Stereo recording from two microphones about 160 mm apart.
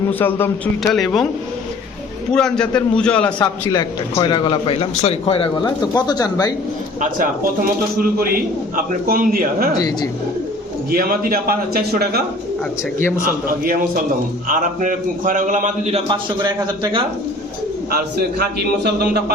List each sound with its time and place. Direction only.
0.1 s a man's voice: 10° left (ahead or behind)
0.8 s speech: centre (ahead or behind)
2.3 s a man's voice: 5° left (ahead or behind)
3.3 s a man's voice: 25° left (ahead or behind)
7.9 s a man's voice: 65° right (ahead or behind)
9.7 s a man's voice: 25° left (ahead or behind)
10.9 s a man's voice: 70° right (ahead or behind)
13.0 s a man's voice: 15° left (ahead or behind)
13.2 s a man's voice: 65° right (ahead or behind); by 16.0 s 45° right (ahead or behind)
16.0 s a man's voice: 30° right (ahead or behind)
17.9 s a man's voice: 85° right